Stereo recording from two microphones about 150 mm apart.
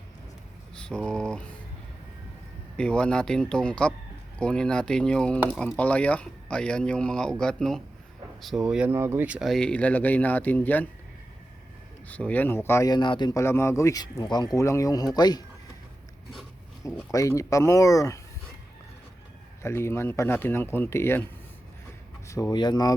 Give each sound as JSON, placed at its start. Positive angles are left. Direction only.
{"t": 0.8, "sound": "speech", "side_deg": 5}
{"t": 2.7, "sound": "speech", "side_deg": 5}
{"t": 12.0, "sound": "speech", "side_deg": 10}
{"t": 13.4, "sound": "speech", "side_deg": 15}
{"t": 17.1, "sound": "speech", "side_deg": 20}
{"t": 19.6, "sound": "speech", "side_deg": 15}
{"t": 22.3, "sound": "speech", "side_deg": 25}